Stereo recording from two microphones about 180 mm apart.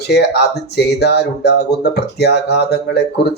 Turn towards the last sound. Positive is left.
turn(degrees=65)  # may be behind; listen again after turning